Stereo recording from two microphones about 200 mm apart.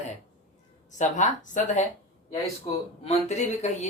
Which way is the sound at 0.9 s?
35° left (ahead or behind).